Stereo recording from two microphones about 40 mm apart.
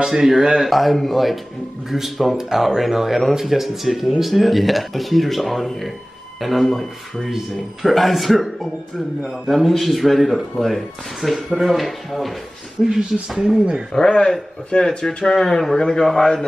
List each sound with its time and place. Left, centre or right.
0.0 s speech: centre
9.5 s speech: centre
12.8 s speech: centre
13.9 s a man's voice: centre